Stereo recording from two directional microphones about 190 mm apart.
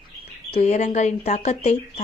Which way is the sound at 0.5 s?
35° left (ahead or behind).